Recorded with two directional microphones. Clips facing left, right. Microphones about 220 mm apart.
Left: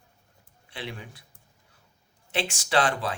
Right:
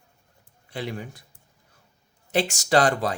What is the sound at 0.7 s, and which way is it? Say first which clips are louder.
Speech: right 6 dB; 45° right (ahead or behind).